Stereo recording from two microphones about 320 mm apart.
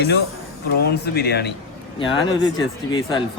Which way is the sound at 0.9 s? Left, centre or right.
Left.